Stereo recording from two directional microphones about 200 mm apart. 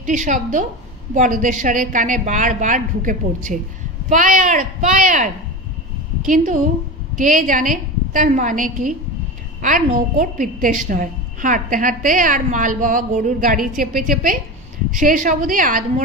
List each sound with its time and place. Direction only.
0.0 s a woman's voice: 40° right (ahead or behind)